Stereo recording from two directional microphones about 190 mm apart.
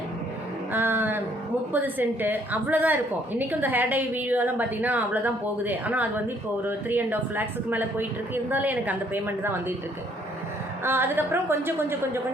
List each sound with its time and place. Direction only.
0.7 s a sound: 10° right (ahead or behind)
1.7 s a woman's voice: 10° right (ahead or behind)
10.8 s a woman's voice: 10° right (ahead or behind)